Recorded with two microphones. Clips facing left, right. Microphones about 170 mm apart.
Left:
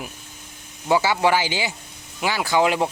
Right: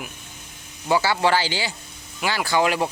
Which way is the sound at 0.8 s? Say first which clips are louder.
Left 1 dB; 15° left (ahead or behind).